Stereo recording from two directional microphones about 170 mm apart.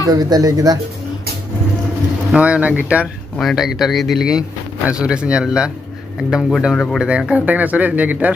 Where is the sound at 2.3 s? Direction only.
5° right (ahead or behind).